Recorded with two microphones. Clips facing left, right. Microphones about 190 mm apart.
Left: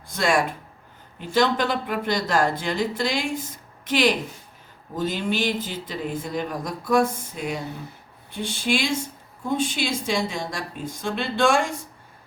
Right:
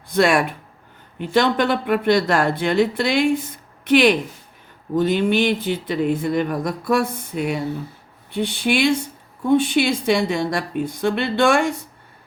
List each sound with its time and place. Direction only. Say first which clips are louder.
0.1 s speech: right 5 dB; 65° right (ahead or behind)